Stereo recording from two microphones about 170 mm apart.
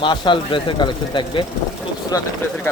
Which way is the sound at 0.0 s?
30° left (ahead or behind).